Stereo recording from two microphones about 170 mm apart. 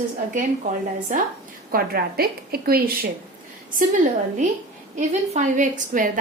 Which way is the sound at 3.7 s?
50° right (ahead or behind).